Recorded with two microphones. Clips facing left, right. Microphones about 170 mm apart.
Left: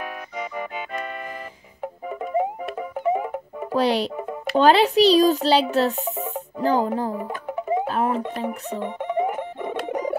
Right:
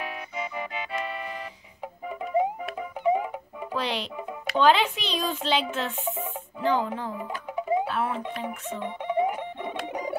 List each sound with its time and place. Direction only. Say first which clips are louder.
2.0 s music: left 1 dB; 45° left (ahead or behind)
4.6 s a child's voice: left 6 dB; 40° left (ahead or behind)
9.4 s music: left 5 dB; 45° left (ahead or behind)